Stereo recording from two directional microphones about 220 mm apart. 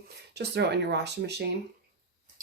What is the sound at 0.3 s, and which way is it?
Speech, 50° right (ahead or behind).